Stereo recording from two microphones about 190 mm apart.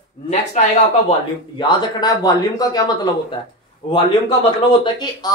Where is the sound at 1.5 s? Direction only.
20° left (ahead or behind).